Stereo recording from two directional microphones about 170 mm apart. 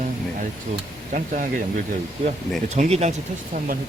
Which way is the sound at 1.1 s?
50° right (ahead or behind).